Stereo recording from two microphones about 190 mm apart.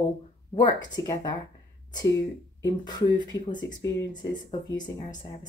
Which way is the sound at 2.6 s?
20° left (ahead or behind).